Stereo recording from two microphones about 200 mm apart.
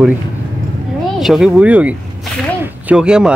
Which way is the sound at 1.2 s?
Centre (ahead or behind).